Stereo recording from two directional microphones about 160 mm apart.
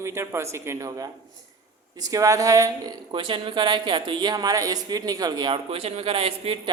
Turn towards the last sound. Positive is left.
turn(degrees=-35)  # may be behind; listen again after turning